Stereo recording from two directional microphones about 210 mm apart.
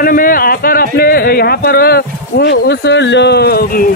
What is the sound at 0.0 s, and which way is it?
A man's voice, 40° left (ahead or behind).